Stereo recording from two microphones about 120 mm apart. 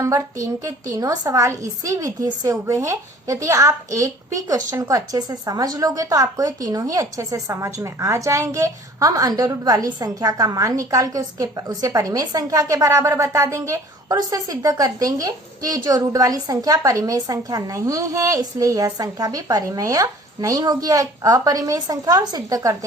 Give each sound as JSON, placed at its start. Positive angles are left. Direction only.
{"t": 0.0, "sound": "a woman's voice", "side_deg": -25}